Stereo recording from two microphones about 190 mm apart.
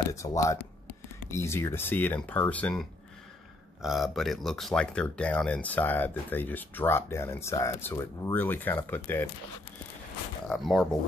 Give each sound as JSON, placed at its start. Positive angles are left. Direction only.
{"t": 0.1, "sound": "speech", "side_deg": 15}
{"t": 10.5, "sound": "speech", "side_deg": 0}